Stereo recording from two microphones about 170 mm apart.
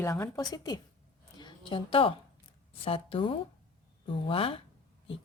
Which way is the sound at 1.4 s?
30° left (ahead or behind).